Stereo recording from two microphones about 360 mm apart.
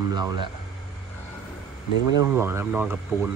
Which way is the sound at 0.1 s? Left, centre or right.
Centre.